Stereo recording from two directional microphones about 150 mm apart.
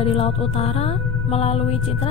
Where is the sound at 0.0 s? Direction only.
40° left (ahead or behind).